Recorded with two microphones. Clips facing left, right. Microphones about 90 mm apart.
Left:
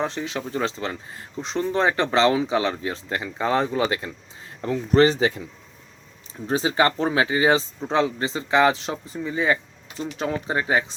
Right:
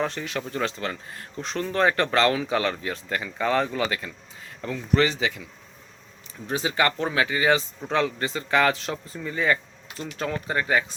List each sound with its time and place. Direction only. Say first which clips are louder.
0.0 s speech: left 1 dB; 20° left (ahead or behind)
6.5 s speech: left 3 dB; 30° left (ahead or behind)